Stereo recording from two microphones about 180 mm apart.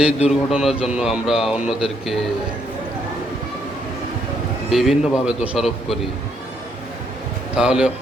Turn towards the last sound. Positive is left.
turn(degrees=-5)  # may be behind; listen again after turning